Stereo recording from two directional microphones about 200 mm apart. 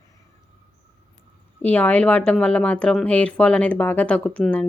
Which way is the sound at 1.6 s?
5° left (ahead or behind).